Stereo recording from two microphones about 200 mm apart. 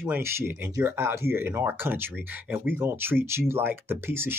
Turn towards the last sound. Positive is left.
turn(degrees=-10)  # may be behind; listen again after turning